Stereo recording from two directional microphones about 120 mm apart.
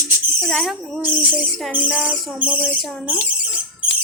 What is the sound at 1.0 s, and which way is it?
Speech, 15° right (ahead or behind).